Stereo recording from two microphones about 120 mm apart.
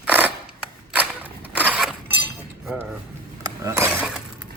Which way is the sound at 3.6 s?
25° right (ahead or behind).